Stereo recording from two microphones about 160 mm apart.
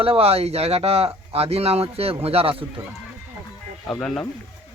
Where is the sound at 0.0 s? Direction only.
35° right (ahead or behind).